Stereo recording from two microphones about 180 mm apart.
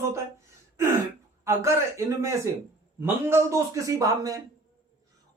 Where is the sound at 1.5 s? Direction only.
15° right (ahead or behind).